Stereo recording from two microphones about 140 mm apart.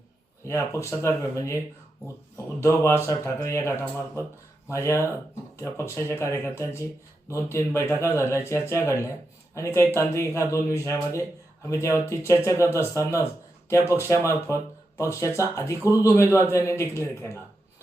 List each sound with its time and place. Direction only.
0.4 s speech: 20° left (ahead or behind)
2.6 s speech: 20° left (ahead or behind)